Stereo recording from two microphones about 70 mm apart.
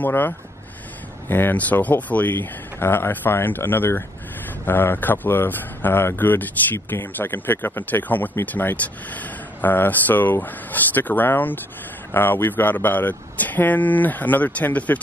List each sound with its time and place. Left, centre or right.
0.0 s speech: left
1.3 s speech: left